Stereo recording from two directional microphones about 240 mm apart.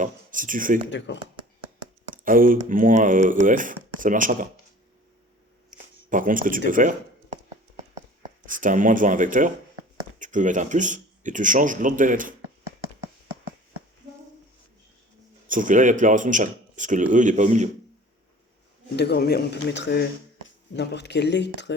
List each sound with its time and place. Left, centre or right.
0.0 s speech: right
0.9 s speech: left
2.0 s speech: right
5.7 s a sound: right
6.1 s speech: right
8.4 s speech: right
15.4 s speech: right
18.9 s a man's voice: left